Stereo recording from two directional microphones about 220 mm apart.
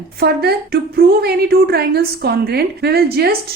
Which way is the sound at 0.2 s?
45° right (ahead or behind).